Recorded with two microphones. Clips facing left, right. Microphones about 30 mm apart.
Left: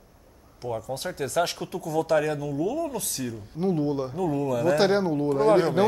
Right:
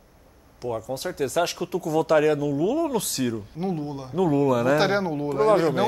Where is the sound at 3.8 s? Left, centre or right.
Centre.